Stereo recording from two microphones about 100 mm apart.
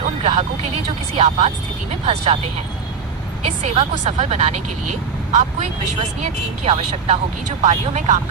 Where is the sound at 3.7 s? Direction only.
90° right.